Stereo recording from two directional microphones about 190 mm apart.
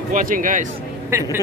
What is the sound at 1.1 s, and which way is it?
Speech, 15° right (ahead or behind).